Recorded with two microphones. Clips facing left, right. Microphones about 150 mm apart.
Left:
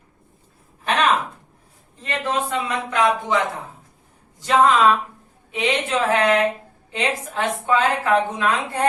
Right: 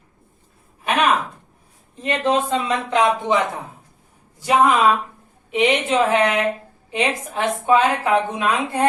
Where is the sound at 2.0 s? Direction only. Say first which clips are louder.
Right 5 dB; 20° right (ahead or behind).